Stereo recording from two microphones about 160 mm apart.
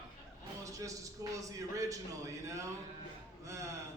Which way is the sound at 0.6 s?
20° right (ahead or behind).